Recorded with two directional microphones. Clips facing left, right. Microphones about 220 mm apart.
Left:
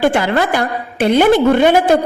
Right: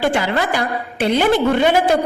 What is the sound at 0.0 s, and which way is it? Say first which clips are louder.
A woman's voice: left 4 dB; 50° left (ahead or behind).